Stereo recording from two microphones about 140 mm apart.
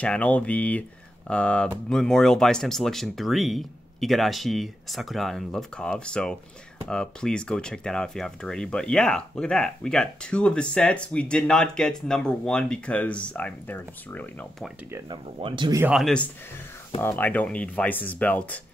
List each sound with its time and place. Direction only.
0.0 s speech: 10° left (ahead or behind)
15.0 s speech: 35° right (ahead or behind)
15.9 s speech: centre (ahead or behind)
17.0 s speech: 15° left (ahead or behind)